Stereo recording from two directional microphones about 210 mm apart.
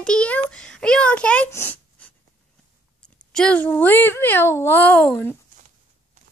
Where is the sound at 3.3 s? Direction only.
5° left (ahead or behind).